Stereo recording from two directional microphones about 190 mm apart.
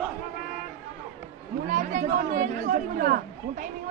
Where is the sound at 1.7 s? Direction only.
45° right (ahead or behind).